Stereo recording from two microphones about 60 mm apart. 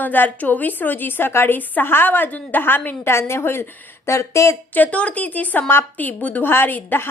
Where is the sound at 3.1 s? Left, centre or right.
Left.